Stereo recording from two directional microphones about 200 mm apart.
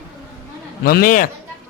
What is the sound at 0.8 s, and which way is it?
Speech, 50° left (ahead or behind).